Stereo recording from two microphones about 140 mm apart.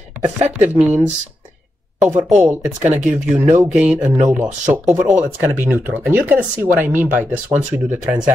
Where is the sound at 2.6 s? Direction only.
20° right (ahead or behind).